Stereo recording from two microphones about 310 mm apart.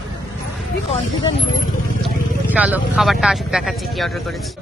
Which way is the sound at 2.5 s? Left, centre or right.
Centre.